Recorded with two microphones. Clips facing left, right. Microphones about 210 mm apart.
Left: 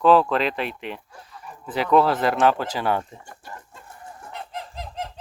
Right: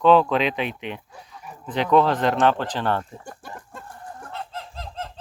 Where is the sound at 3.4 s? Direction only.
55° right (ahead or behind).